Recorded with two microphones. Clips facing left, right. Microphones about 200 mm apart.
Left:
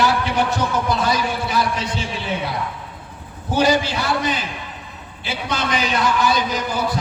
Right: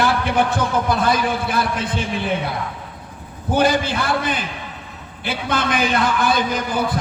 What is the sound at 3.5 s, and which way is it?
A man's voice, 55° right (ahead or behind).